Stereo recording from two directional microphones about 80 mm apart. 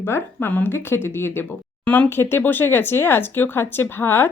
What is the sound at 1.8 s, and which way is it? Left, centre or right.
Speech, centre.